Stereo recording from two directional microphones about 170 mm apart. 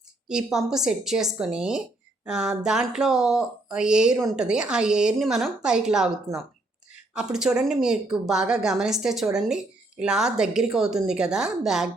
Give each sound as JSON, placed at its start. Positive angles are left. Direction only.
{"t": 0.3, "sound": "speech", "side_deg": -5}